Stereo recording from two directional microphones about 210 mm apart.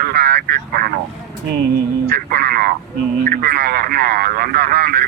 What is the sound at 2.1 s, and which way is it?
Speech, 50° right (ahead or behind).